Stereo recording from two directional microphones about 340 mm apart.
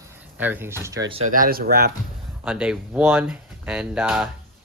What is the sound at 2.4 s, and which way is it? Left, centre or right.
Speech, centre.